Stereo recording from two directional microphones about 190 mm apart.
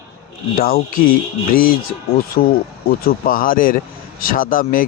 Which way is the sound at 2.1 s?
50° left (ahead or behind).